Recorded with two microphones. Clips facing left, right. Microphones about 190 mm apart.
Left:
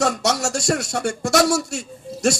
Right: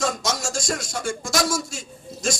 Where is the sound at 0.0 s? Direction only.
65° left (ahead or behind).